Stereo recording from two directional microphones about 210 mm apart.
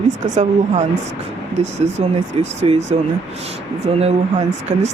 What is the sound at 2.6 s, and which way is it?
Speech, 30° right (ahead or behind).